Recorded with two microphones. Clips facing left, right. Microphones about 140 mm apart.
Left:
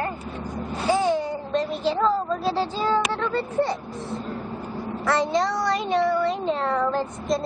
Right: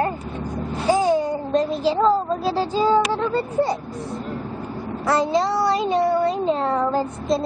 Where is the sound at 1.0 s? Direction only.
40° right (ahead or behind).